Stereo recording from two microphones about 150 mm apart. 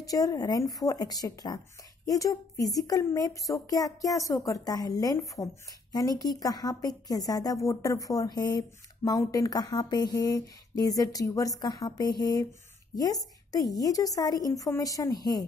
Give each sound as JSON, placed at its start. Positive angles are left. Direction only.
{"t": 0.0, "sound": "a woman's voice", "side_deg": 25}